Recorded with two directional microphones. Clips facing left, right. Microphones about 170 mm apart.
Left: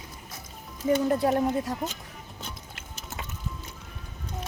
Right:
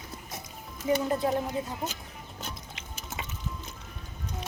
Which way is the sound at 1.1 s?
65° left (ahead or behind).